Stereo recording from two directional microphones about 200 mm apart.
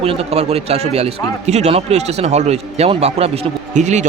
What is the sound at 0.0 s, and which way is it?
A man's voice, 30° right (ahead or behind).